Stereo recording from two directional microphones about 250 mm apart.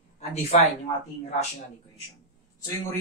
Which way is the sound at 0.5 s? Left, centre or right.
Left.